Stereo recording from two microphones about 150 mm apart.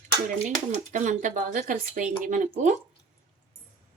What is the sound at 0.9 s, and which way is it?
Speech, 55° right (ahead or behind).